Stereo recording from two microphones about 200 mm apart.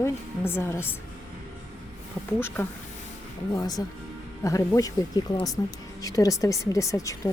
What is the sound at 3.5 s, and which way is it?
A woman's voice, 20° left (ahead or behind).